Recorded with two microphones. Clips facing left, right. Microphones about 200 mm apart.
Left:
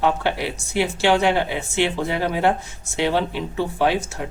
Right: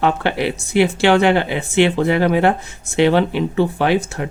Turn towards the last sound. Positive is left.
turn(degrees=-65)  # may be behind; listen again after turning